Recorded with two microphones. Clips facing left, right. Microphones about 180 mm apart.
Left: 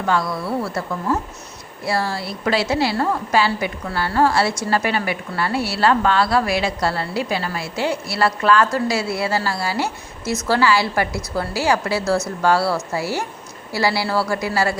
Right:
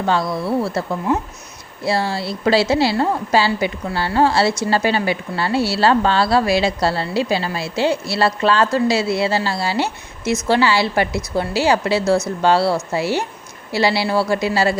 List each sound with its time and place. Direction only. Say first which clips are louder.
0.0 s a woman's voice: right 2 dB; 25° right (ahead or behind)